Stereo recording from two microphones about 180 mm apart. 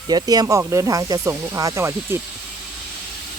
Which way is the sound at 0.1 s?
20° right (ahead or behind).